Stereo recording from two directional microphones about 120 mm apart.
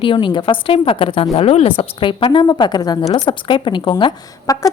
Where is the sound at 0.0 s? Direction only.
45° left (ahead or behind).